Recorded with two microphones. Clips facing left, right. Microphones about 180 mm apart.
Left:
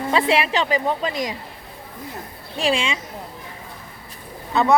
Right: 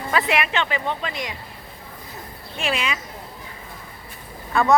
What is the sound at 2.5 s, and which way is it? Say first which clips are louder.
Speech: left 4 dB; 30° left (ahead or behind).